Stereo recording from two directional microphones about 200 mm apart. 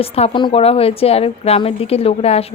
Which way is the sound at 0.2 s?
25° left (ahead or behind).